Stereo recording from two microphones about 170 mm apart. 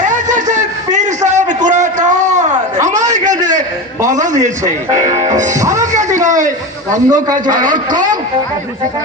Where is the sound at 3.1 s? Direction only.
45° right (ahead or behind).